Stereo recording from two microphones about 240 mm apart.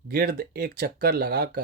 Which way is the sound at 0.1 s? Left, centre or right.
Right.